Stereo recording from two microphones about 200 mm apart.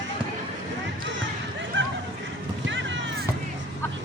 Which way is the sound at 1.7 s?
70° right (ahead or behind).